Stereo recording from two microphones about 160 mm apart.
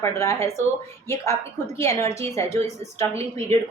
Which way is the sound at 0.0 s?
15° left (ahead or behind).